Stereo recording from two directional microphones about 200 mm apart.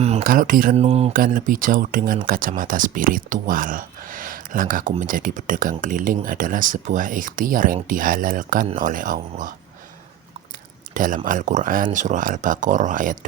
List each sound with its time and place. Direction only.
0.0 s speech: 40° right (ahead or behind)
0.8 s speech: 30° right (ahead or behind)
1.1 s speech: 45° right (ahead or behind)
10.9 s speech: 40° right (ahead or behind)